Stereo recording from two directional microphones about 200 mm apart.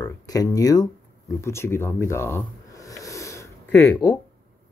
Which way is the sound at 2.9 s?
15° left (ahead or behind).